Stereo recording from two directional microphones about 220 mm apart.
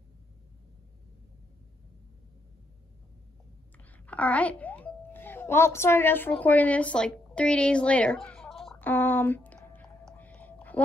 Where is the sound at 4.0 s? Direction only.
5° left (ahead or behind).